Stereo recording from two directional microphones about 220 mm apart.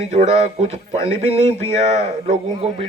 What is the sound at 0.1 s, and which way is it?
Speech, 30° right (ahead or behind).